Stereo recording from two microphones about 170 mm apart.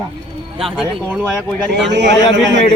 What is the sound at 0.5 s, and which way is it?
Speech, centre (ahead or behind).